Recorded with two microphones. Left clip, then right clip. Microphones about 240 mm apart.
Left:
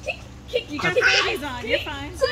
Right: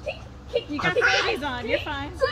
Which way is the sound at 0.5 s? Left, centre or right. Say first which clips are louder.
Left 2 dB; centre.